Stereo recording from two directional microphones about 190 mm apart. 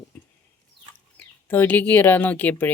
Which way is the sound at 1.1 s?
10° left (ahead or behind).